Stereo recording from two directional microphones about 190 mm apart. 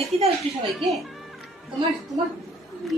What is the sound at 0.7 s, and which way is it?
Speech, centre (ahead or behind).